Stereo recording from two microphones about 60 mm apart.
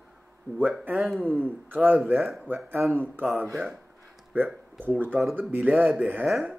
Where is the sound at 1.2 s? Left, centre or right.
Right.